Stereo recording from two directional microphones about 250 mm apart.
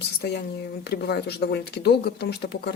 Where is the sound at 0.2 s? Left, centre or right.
Left.